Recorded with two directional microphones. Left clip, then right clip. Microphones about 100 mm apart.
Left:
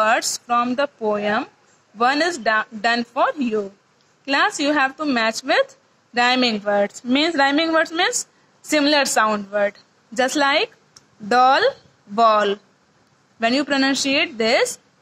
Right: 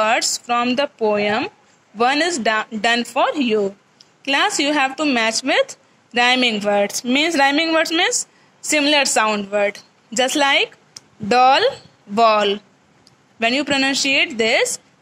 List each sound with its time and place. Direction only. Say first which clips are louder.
0.0 s speech: right 1 dB; 20° right (ahead or behind)